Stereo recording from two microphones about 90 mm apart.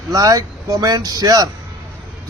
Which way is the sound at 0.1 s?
45° right (ahead or behind).